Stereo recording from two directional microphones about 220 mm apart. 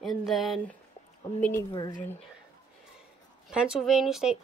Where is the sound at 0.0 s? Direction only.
Centre (ahead or behind).